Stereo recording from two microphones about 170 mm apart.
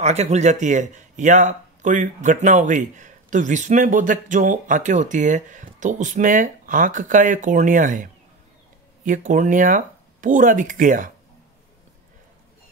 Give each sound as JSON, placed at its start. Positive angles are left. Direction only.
{"t": 0.0, "sound": "speech", "side_deg": -40}